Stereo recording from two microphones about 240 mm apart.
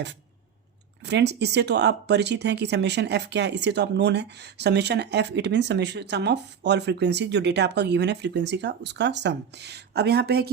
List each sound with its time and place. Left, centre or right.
1.0 s speech: right